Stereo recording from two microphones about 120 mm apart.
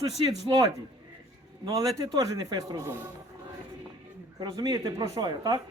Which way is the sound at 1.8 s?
30° right (ahead or behind).